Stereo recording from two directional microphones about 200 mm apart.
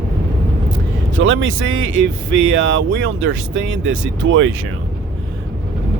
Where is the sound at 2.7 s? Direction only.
75° right (ahead or behind).